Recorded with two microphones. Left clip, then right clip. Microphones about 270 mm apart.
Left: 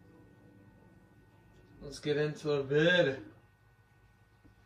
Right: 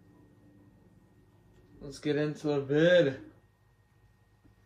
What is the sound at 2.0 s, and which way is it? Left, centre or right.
Speech, centre.